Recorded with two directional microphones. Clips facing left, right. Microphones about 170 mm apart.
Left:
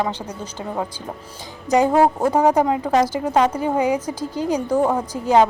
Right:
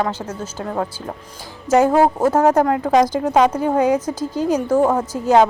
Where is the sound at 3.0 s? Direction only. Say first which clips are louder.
Right 3 dB; 10° left (ahead or behind).